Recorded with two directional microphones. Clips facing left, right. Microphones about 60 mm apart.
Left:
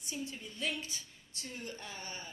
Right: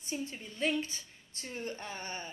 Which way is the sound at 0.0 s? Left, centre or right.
Right.